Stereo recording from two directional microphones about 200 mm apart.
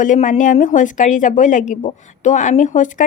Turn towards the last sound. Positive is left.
turn(degrees=40)  # may be behind; listen again after turning